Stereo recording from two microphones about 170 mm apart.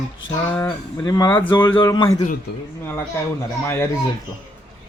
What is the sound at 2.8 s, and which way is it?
A man's voice, 15° left (ahead or behind).